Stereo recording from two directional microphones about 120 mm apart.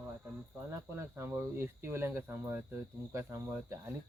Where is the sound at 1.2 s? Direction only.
20° right (ahead or behind).